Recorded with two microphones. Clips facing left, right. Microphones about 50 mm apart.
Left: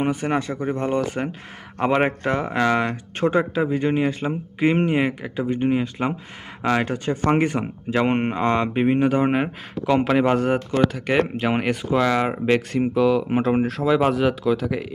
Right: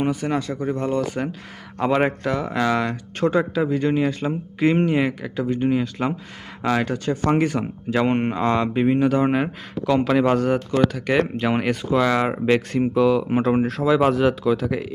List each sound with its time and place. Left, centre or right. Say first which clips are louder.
0.0 s speech: even; left; by 4.7 s centre
4.7 s speech: even; left; by 14.8 s centre